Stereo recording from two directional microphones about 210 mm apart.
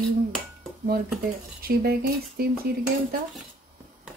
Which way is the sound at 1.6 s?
45° right (ahead or behind).